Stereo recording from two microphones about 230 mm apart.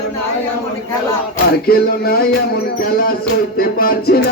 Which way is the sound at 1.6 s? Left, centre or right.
Left.